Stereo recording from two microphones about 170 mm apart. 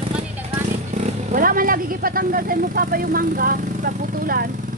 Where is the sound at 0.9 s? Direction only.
55° right (ahead or behind).